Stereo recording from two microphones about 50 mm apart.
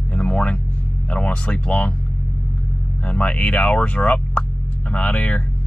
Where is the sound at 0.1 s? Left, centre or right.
Left.